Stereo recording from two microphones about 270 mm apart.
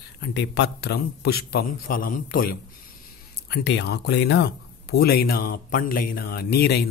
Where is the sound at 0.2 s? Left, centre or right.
Left.